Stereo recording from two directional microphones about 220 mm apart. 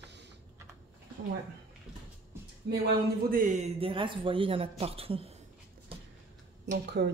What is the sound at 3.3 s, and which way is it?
Speech, 35° right (ahead or behind).